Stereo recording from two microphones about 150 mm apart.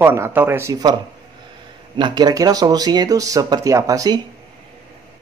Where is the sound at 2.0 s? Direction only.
30° right (ahead or behind).